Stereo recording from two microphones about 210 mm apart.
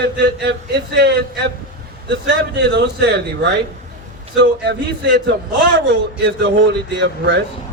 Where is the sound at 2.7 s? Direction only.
55° right (ahead or behind).